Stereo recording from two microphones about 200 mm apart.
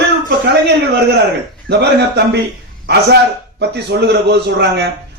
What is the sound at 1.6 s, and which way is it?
Speech, 55° right (ahead or behind).